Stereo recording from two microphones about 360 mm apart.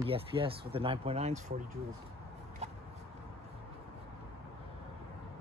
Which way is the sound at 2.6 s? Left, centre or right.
Centre.